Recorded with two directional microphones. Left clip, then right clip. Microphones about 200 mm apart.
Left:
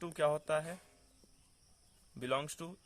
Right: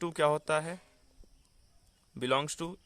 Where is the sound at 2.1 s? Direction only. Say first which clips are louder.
Right 6 dB; 35° right (ahead or behind).